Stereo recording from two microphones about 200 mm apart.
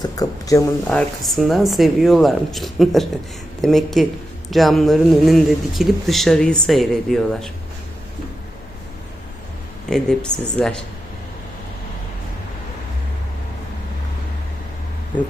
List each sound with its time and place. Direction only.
0.0 s speech: 15° left (ahead or behind)
0.9 s speech: centre (ahead or behind)
9.9 s speech: 5° left (ahead or behind)